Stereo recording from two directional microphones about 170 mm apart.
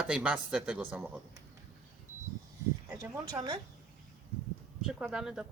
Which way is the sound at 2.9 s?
20° right (ahead or behind).